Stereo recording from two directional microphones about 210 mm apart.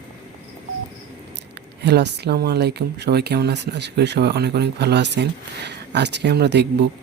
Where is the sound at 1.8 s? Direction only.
50° right (ahead or behind).